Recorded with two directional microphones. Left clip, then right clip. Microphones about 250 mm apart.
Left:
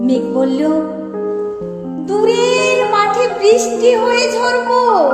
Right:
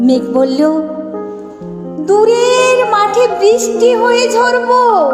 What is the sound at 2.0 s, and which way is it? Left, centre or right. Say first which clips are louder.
Music: right 4 dB; right.